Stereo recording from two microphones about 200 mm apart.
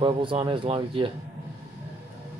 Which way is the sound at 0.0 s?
25° right (ahead or behind).